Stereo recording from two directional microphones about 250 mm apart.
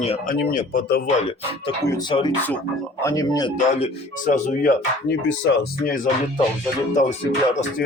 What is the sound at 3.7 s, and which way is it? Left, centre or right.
Speech, left.